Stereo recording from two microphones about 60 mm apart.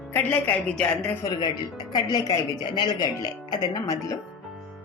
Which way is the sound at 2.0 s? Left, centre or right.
Left.